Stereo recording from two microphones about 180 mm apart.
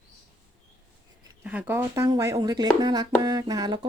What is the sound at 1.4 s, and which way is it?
Speech, 10° right (ahead or behind).